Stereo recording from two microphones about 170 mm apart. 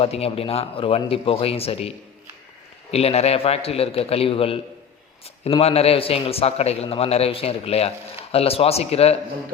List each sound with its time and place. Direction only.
0.0 s a man's voice: 35° left (ahead or behind)
2.9 s a man's voice: 40° left (ahead or behind)